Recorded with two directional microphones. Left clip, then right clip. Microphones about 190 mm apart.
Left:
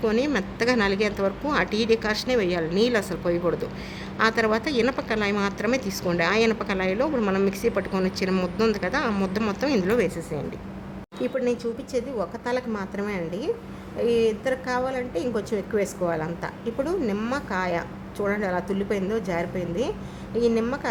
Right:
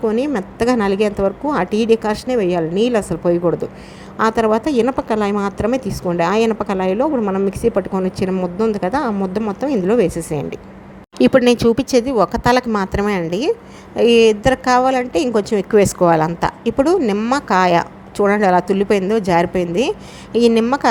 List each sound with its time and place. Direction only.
0.3 s speech: 35° right (ahead or behind)
7.2 s speech: 20° right (ahead or behind)
7.6 s speech: 30° right (ahead or behind)
11.2 s speech: 45° right (ahead or behind)